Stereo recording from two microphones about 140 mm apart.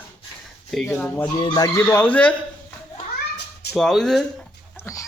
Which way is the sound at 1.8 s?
15° left (ahead or behind).